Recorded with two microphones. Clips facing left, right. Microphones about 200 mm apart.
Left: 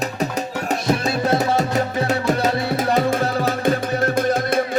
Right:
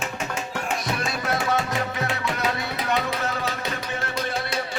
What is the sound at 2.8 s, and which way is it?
Music, 45° left (ahead or behind).